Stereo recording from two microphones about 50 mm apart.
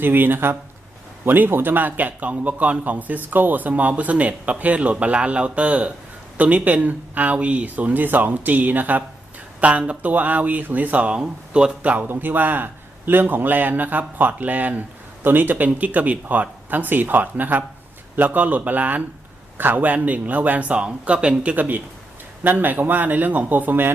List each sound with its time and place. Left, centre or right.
0.0 s a man's voice: right
11.2 s speech: centre
11.8 s a man's voice: right
12.0 s a man's voice: right